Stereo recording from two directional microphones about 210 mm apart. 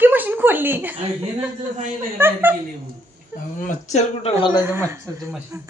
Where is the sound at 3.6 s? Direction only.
35° left (ahead or behind).